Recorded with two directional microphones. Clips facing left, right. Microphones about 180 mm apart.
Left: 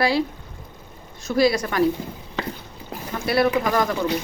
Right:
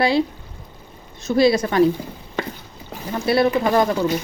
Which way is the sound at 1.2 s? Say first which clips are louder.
Right 3 dB; 25° right (ahead or behind).